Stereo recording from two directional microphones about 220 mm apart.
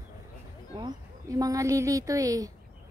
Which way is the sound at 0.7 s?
20° right (ahead or behind).